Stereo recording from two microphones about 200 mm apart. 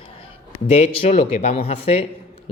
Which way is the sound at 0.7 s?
35° left (ahead or behind).